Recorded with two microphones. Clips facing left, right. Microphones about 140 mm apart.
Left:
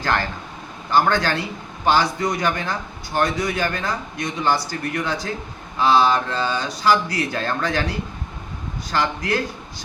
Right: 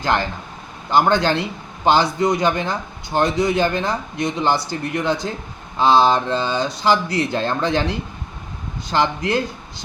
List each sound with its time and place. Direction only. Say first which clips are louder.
0.0 s a man's voice: right 2 dB; 20° right (ahead or behind)